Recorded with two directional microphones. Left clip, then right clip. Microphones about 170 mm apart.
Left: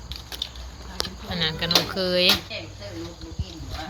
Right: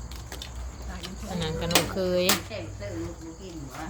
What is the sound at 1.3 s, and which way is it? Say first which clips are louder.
Speech: left 4 dB; centre (ahead or behind).